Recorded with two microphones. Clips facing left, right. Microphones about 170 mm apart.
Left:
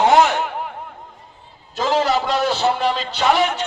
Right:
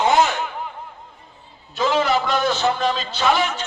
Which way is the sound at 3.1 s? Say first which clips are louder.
Left 4 dB; 65° left (ahead or behind).